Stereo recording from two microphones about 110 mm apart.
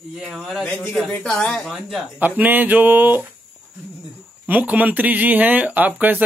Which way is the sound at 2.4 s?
15° right (ahead or behind).